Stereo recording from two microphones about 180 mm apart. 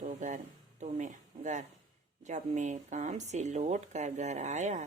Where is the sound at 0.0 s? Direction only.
45° right (ahead or behind).